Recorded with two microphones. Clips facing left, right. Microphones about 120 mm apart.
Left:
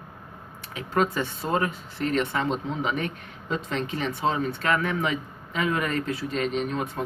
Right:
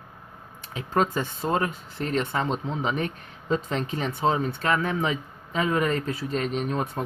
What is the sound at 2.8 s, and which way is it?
Speech, 35° right (ahead or behind).